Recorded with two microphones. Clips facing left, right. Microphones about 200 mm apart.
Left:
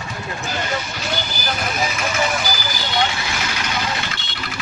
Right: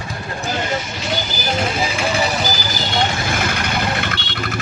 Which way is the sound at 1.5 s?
30° right (ahead or behind).